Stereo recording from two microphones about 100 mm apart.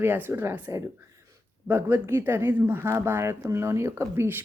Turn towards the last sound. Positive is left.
turn(degrees=-25)  # may be behind; listen again after turning